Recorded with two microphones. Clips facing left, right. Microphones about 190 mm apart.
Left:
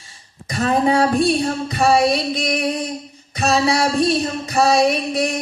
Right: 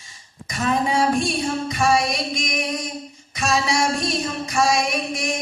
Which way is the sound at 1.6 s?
35° left (ahead or behind).